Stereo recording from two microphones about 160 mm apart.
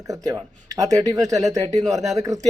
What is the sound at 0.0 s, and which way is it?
Speech, 20° right (ahead or behind).